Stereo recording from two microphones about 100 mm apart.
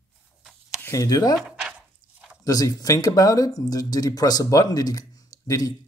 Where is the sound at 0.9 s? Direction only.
35° left (ahead or behind).